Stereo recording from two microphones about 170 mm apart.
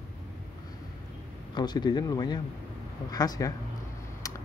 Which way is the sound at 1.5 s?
25° left (ahead or behind).